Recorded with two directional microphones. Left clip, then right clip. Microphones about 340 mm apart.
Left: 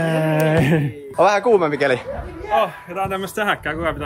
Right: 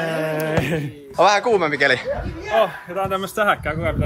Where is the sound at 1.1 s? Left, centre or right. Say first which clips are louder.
Left 1 dB; centre.